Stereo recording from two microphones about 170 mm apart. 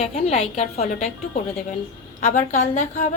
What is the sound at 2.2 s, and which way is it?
Speech, 45° left (ahead or behind).